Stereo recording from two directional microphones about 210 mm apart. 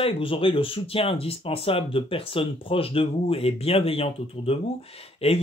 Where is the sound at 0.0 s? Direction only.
25° left (ahead or behind).